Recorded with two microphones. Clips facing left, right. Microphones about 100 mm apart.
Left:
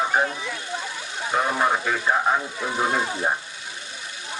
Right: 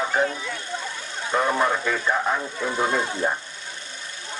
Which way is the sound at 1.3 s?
15° left (ahead or behind).